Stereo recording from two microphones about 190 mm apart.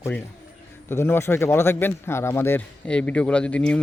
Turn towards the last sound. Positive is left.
turn(degrees=5)  # may be behind; listen again after turning